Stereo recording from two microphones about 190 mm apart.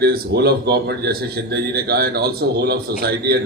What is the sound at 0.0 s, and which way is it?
A man's voice, 55° right (ahead or behind).